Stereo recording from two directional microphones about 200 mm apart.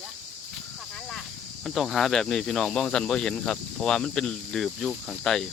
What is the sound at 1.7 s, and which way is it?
Speech, centre (ahead or behind).